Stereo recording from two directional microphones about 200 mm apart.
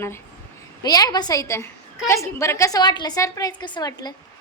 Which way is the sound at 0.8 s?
20° left (ahead or behind).